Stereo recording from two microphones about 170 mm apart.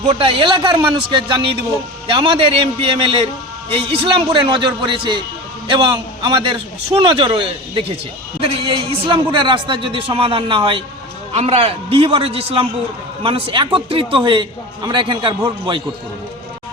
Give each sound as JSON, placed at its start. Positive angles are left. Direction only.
{"t": 0.0, "sound": "a man's voice", "side_deg": -30}